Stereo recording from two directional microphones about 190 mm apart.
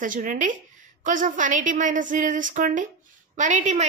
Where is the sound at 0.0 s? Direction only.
45° right (ahead or behind).